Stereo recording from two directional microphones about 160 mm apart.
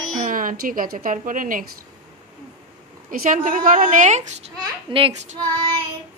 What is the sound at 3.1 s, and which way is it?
Speech, 55° right (ahead or behind).